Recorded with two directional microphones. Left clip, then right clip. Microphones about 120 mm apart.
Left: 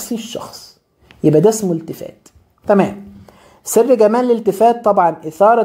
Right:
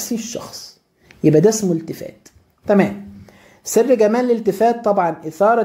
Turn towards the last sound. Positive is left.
turn(degrees=20)  # may be behind; listen again after turning